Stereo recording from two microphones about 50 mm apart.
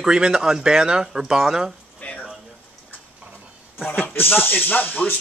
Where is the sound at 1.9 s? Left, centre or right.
Left.